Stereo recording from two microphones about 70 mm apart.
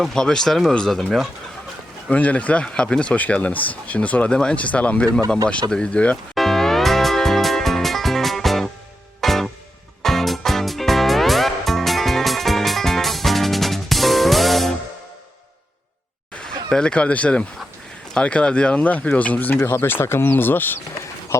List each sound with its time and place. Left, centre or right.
0.0 s speech: centre
2.0 s speech: left
6.3 s music: centre
16.6 s speech: centre
19.6 s speech: left